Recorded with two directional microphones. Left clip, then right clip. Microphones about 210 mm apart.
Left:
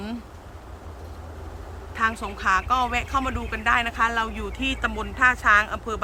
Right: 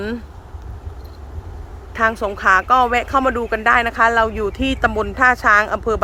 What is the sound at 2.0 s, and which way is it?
Speech, 20° right (ahead or behind).